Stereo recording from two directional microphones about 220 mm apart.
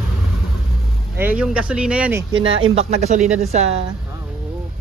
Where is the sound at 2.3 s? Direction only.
65° right (ahead or behind).